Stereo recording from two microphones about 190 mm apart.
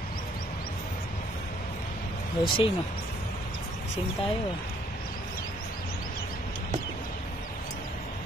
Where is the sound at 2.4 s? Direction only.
25° left (ahead or behind).